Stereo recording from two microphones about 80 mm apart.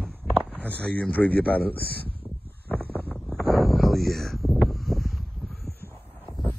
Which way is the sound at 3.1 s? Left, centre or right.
Centre.